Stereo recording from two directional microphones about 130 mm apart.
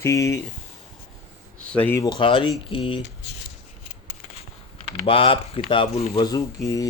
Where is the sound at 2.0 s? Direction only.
35° left (ahead or behind).